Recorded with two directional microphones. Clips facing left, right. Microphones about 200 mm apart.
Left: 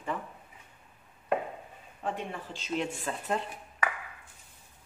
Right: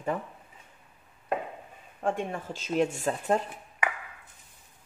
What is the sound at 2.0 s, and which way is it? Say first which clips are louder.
Speech: right 5 dB; 45° right (ahead or behind).